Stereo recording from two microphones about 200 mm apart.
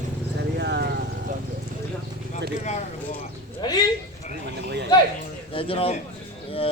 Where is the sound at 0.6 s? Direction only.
55° right (ahead or behind).